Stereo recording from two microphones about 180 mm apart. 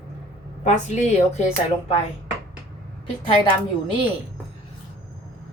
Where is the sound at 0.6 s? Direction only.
40° left (ahead or behind).